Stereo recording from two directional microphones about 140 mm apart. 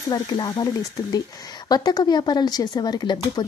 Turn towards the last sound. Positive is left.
turn(degrees=30)  # may be behind; listen again after turning